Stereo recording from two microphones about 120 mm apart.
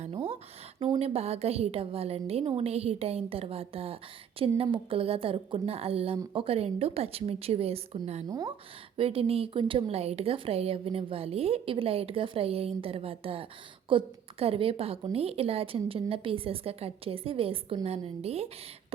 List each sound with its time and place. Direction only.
0.1 s a sound: 45° right (ahead or behind)
0.9 s a woman's voice: 60° right (ahead or behind)
9.0 s a woman's voice: 55° right (ahead or behind)